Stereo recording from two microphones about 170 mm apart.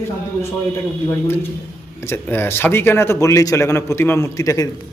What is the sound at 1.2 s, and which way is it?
A man's voice, 15° left (ahead or behind).